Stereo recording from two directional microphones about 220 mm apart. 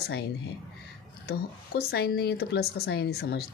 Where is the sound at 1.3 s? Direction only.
45° left (ahead or behind).